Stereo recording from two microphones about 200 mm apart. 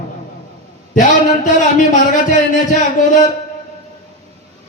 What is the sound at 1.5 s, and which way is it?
A man's voice, 40° left (ahead or behind).